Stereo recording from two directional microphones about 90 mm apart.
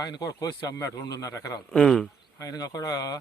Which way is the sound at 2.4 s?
40° left (ahead or behind).